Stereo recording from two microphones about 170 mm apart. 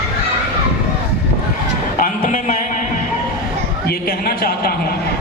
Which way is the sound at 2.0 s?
50° left (ahead or behind).